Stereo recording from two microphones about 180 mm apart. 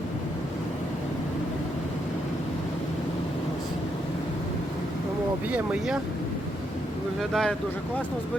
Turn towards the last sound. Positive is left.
turn(degrees=0)  # may be behind; listen again after turning